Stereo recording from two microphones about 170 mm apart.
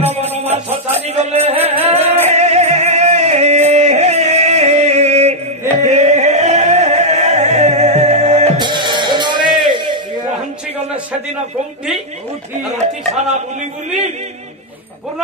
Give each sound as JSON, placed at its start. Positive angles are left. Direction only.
{"t": 0.4, "sound": "music", "side_deg": -40}
{"t": 8.5, "sound": "music", "side_deg": -25}
{"t": 12.8, "sound": "speech", "side_deg": -40}